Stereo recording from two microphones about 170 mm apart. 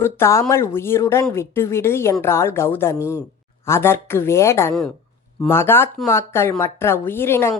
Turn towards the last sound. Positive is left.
turn(degrees=15)  # may be behind; listen again after turning